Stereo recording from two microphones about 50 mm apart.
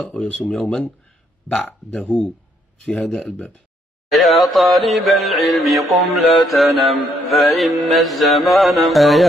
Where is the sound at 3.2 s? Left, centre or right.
Left.